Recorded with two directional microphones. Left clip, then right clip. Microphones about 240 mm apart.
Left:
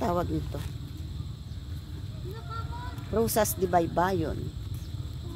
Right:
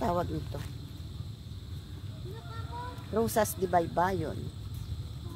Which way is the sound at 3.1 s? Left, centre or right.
Centre.